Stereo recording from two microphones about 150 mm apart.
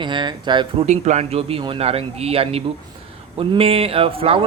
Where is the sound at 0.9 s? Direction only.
50° right (ahead or behind).